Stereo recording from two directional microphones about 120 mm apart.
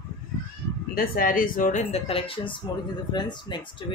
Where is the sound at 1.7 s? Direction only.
60° left (ahead or behind).